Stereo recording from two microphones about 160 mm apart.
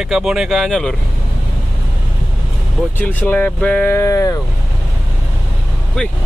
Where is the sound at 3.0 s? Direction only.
10° left (ahead or behind).